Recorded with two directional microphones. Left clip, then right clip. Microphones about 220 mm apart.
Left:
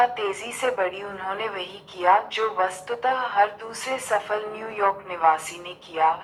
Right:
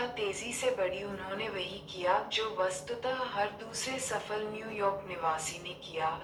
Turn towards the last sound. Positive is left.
turn(degrees=20)  # may be behind; listen again after turning